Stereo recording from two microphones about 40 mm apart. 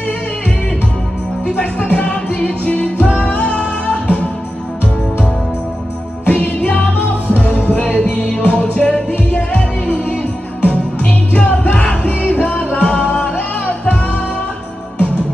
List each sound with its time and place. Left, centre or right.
1.6 s music: left
6.2 s music: left
15.0 s music: left